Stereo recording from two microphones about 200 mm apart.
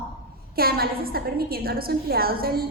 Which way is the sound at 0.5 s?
50° right (ahead or behind).